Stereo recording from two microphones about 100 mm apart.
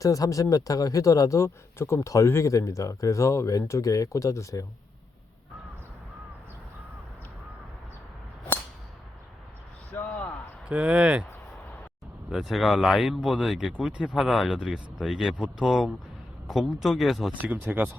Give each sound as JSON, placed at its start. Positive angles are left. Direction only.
{"t": 0.0, "sound": "speech", "side_deg": 35}
{"t": 9.9, "sound": "a sound", "side_deg": 15}
{"t": 10.7, "sound": "speech", "side_deg": -10}
{"t": 12.3, "sound": "speech", "side_deg": 0}
{"t": 17.3, "sound": "speech", "side_deg": -15}